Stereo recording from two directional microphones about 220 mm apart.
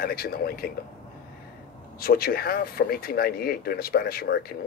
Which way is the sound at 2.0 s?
45° left (ahead or behind).